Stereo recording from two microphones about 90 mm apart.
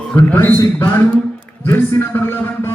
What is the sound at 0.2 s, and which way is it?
A man's voice, 25° left (ahead or behind).